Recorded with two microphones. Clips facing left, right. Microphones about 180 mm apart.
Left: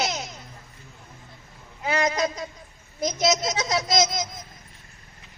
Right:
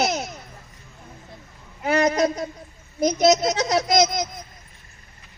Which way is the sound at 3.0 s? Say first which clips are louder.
Right 6 dB; 60° right (ahead or behind).